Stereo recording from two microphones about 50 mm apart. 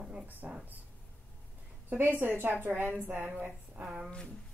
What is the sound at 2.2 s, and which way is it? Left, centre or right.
A woman's voice, right.